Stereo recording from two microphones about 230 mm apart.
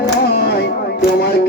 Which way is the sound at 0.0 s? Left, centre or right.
Left.